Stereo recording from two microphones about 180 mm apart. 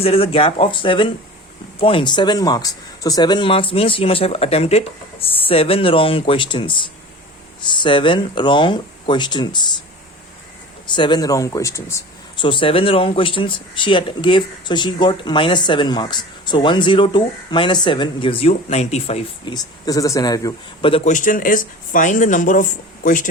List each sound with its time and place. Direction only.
0.0 s speech: 30° left (ahead or behind)
10.9 s speech: 25° left (ahead or behind)
12.4 s speech: 30° left (ahead or behind)
19.5 s speech: 20° left (ahead or behind)
20.9 s speech: 40° left (ahead or behind)